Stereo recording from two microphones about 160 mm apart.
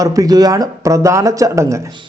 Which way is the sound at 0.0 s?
20° right (ahead or behind).